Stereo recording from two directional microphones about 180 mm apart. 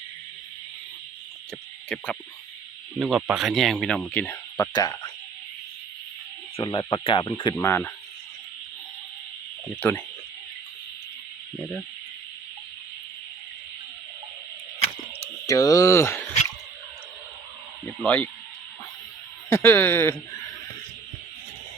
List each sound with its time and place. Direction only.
1.9 s speech: 5° left (ahead or behind)
4.5 s speech: 20° left (ahead or behind)
6.6 s speech: 25° left (ahead or behind)
7.5 s speech: 15° left (ahead or behind)
9.8 s speech: 10° left (ahead or behind)
15.4 s speech: 20° left (ahead or behind)
18.0 s speech: 5° left (ahead or behind)
19.5 s speech: 15° left (ahead or behind)